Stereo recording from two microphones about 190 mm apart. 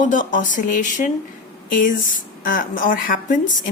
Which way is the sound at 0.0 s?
45° left (ahead or behind).